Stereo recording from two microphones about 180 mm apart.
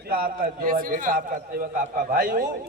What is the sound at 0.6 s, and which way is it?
Speech, 50° right (ahead or behind).